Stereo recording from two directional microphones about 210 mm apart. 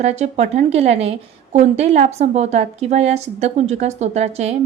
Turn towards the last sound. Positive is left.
turn(degrees=-30)  # may be behind; listen again after turning